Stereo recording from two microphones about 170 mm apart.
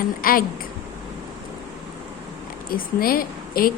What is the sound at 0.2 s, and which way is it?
Speech, 55° left (ahead or behind).